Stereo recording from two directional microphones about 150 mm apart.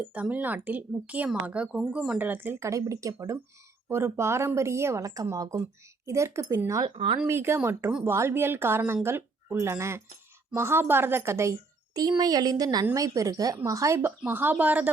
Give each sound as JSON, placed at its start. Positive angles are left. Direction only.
{"t": 0.1, "sound": "a woman's voice", "side_deg": -10}
{"t": 6.8, "sound": "speech", "side_deg": -35}
{"t": 7.3, "sound": "a woman's voice", "side_deg": -15}